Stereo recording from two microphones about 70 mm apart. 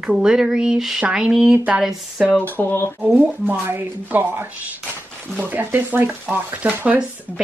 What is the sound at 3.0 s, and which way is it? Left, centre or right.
Speech, right.